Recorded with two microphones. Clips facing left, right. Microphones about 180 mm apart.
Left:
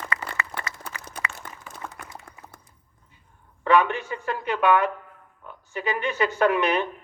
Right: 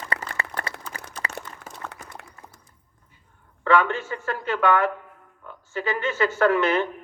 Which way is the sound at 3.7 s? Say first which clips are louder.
Even; 15° left (ahead or behind).